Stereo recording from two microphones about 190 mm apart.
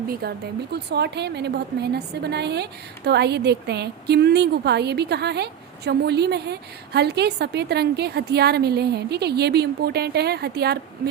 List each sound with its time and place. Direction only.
0.1 s a woman's voice: 55° right (ahead or behind)